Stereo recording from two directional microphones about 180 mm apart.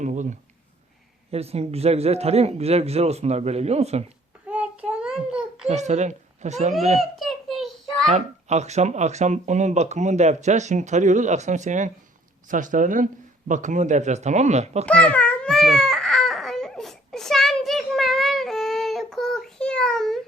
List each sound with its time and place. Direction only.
0.0 s a sound: 45° right (ahead or behind)
1.3 s speech: 35° right (ahead or behind)
4.4 s child singing: 5° right (ahead or behind)
5.6 s speech: 40° right (ahead or behind)
7.0 s a sound: centre (ahead or behind)
8.0 s speech: 40° right (ahead or behind)
14.8 s babbling: 5° left (ahead or behind)